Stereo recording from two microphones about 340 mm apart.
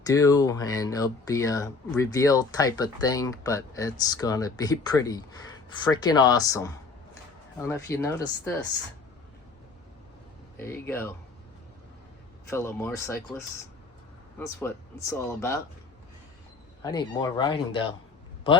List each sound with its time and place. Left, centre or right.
0.0 s speech: centre
10.6 s speech: centre
12.5 s speech: centre
15.1 s speech: centre
16.8 s speech: centre